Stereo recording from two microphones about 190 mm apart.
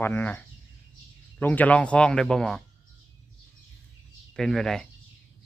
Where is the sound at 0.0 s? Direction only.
10° left (ahead or behind).